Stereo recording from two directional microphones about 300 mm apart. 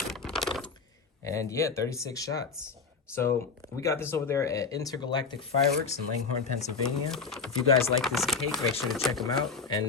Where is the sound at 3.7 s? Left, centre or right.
Centre.